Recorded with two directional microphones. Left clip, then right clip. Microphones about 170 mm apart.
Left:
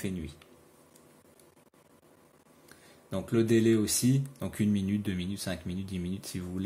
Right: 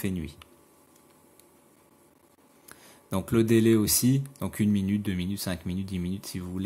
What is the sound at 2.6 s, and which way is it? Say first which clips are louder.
Speech: right 4 dB; 30° right (ahead or behind).